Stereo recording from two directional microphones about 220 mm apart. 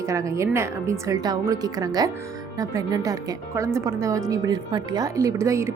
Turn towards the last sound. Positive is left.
turn(degrees=-15)  # may be behind; listen again after turning